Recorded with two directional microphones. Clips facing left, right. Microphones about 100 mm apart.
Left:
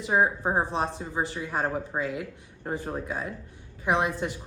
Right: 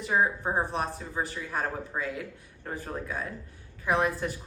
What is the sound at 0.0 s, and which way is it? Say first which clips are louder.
Speech: left 2 dB; 25° left (ahead or behind).